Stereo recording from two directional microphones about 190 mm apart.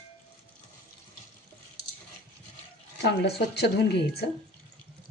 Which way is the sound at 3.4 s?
60° left (ahead or behind).